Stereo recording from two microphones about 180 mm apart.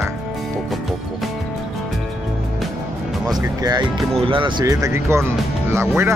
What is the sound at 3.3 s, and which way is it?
Speech, 20° right (ahead or behind).